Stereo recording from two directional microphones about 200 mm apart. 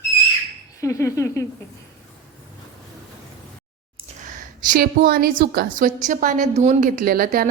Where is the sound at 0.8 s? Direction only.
15° left (ahead or behind).